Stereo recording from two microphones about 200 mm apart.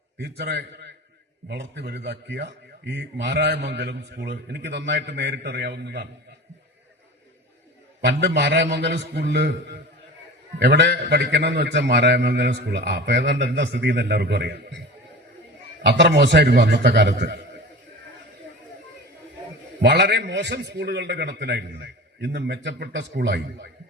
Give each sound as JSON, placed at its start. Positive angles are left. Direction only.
{"t": 0.2, "sound": "a man's voice", "side_deg": -55}
{"t": 8.0, "sound": "a man's voice", "side_deg": -60}
{"t": 10.6, "sound": "a man's voice", "side_deg": -55}
{"t": 15.8, "sound": "a man's voice", "side_deg": -60}
{"t": 19.8, "sound": "a man's voice", "side_deg": -55}